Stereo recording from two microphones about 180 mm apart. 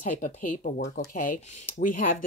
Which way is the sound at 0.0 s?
45° left (ahead or behind).